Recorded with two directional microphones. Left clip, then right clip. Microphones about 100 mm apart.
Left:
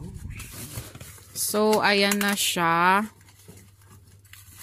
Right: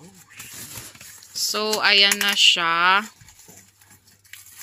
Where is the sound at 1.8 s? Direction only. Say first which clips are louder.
Right 5 dB; 55° left (ahead or behind).